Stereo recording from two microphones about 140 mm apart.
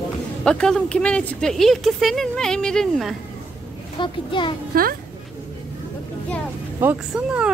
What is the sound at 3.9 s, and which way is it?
Speech, 35° left (ahead or behind).